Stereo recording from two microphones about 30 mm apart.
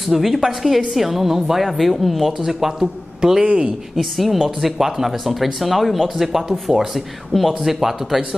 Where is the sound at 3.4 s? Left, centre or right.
Right.